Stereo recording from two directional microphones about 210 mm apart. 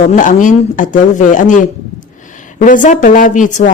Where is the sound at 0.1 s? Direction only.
35° left (ahead or behind).